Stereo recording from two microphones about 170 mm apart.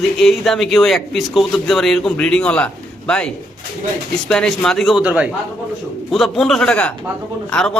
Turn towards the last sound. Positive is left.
turn(degrees=5)  # may be behind; listen again after turning